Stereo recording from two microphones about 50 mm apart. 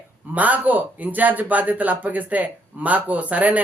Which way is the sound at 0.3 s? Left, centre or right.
Right.